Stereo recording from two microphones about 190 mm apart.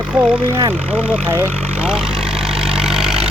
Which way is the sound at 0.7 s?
10° right (ahead or behind).